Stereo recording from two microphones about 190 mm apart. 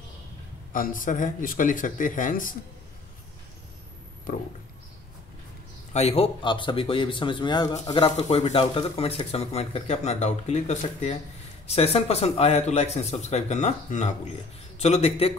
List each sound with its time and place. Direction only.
0.7 s speech: 45° left (ahead or behind)
4.3 s a sound: 45° left (ahead or behind)
5.9 s speech: 35° left (ahead or behind)